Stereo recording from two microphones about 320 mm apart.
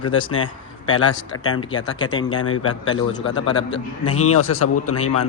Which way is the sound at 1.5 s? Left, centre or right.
Centre.